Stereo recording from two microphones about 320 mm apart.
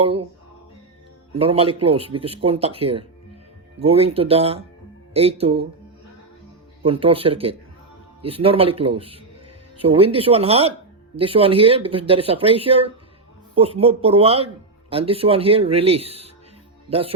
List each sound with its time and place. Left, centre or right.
0.0 s speech: centre
1.3 s speech: centre
6.8 s speech: centre